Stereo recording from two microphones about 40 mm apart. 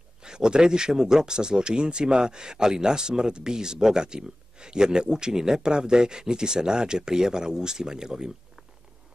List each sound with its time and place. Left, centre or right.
0.2 s speech: centre